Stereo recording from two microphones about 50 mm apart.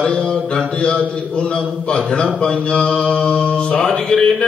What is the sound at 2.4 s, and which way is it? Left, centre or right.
A man's voice, left.